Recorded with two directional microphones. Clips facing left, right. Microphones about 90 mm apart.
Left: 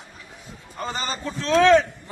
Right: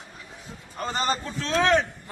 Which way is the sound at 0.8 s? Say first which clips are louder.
Right 2 dB; 40° right (ahead or behind).